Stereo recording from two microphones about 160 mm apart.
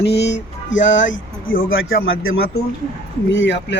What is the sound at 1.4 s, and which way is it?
Speech, 65° left (ahead or behind).